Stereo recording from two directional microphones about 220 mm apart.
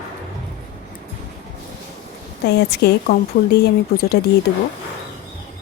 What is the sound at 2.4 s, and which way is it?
A woman's voice, 50° left (ahead or behind).